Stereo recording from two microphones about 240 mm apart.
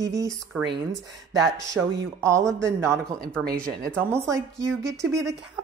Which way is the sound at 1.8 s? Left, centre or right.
Centre.